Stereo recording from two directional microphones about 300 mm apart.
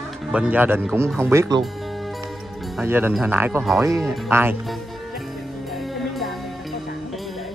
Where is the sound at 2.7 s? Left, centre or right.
Centre.